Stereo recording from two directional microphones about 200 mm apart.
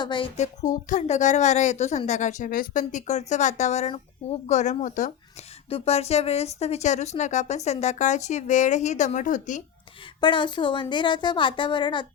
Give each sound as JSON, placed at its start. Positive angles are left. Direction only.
{"t": 0.0, "sound": "a woman's voice", "side_deg": 25}
{"t": 0.7, "sound": "a woman's voice", "side_deg": 40}
{"t": 10.2, "sound": "a woman's voice", "side_deg": 25}